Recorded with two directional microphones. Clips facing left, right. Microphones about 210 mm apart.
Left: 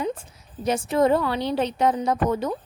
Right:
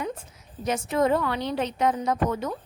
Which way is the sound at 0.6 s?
30° left (ahead or behind).